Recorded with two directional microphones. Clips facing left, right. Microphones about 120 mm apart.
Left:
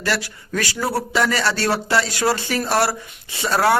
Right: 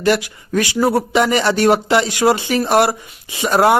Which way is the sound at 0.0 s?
20° right (ahead or behind).